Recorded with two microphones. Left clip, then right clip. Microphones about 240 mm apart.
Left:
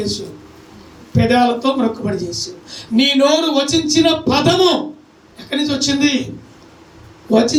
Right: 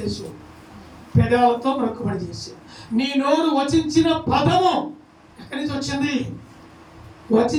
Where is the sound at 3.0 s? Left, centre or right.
Left.